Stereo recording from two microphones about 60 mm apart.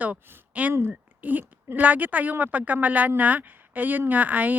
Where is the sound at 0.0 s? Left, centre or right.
Right.